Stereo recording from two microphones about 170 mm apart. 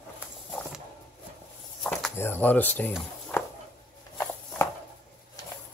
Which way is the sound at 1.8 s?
5° left (ahead or behind).